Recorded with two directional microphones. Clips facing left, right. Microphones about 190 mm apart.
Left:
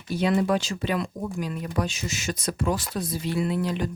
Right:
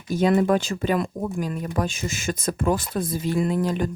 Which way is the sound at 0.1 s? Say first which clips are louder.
Right 4 dB; 45° right (ahead or behind).